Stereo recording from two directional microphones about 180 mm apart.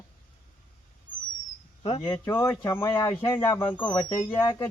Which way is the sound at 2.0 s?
15° left (ahead or behind).